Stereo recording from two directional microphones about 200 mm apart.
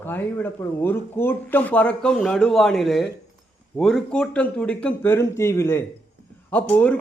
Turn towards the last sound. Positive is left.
turn(degrees=5)  # may be behind; listen again after turning